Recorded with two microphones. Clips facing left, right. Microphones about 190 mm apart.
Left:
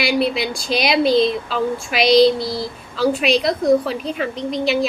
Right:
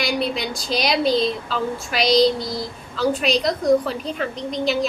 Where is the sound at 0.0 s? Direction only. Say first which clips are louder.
Left 4 dB; 10° left (ahead or behind).